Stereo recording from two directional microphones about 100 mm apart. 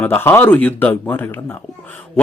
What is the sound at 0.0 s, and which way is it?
Speech, 20° left (ahead or behind).